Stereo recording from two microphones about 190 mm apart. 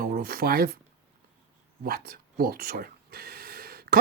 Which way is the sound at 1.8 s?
50° right (ahead or behind).